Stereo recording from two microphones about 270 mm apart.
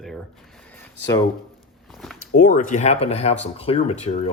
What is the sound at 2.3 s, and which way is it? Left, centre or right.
Speech, left.